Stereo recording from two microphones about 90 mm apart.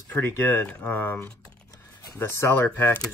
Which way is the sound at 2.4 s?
25° left (ahead or behind).